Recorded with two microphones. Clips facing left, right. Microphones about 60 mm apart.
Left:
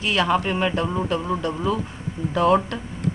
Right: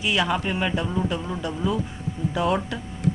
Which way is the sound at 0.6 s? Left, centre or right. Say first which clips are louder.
Left 2 dB; centre.